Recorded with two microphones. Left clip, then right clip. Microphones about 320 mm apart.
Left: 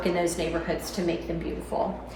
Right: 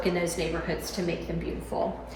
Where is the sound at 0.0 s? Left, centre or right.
Centre.